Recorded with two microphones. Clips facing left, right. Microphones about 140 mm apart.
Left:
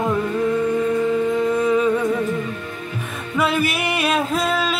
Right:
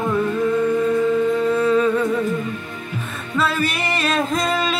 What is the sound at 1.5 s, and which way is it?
Music, 15° left (ahead or behind).